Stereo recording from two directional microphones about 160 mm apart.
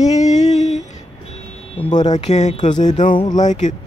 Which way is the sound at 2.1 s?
45° left (ahead or behind).